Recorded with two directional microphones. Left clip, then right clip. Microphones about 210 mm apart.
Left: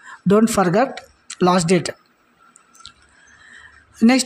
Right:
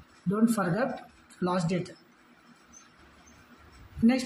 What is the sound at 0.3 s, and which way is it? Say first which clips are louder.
Speech: left 13 dB; 45° left (ahead or behind).